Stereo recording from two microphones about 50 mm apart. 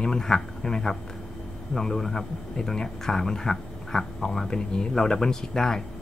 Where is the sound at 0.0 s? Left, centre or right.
Centre.